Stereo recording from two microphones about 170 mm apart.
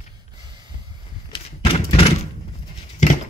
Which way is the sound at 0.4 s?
25° right (ahead or behind).